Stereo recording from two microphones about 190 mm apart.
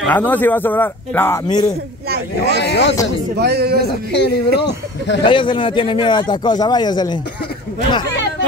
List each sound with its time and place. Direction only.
0.0 s speech: 10° left (ahead or behind)
2.0 s speech: 60° right (ahead or behind)
2.6 s a man's voice: 60° left (ahead or behind)
3.3 s speech: 55° right (ahead or behind)
3.8 s a man's voice: 60° left (ahead or behind)
5.2 s speech: 25° left (ahead or behind)